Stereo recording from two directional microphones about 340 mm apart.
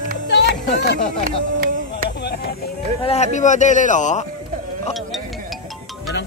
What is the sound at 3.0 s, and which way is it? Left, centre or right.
Speech, centre.